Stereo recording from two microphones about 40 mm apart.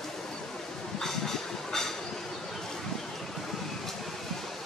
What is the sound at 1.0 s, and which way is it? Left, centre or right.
Vehicle, centre.